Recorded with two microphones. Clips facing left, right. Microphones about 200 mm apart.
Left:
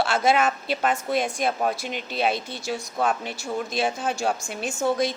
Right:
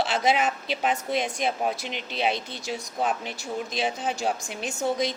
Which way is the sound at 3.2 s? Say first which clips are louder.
Left 3 dB; 10° left (ahead or behind).